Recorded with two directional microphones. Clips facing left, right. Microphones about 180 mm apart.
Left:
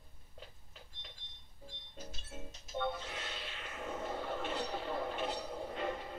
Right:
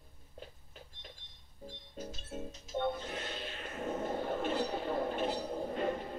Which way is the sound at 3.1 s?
45° right (ahead or behind).